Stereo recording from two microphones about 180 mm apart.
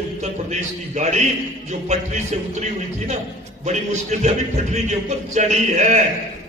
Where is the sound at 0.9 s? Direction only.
40° right (ahead or behind).